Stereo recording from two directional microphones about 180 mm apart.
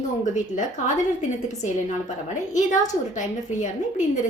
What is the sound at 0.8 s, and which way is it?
Speech, 40° left (ahead or behind).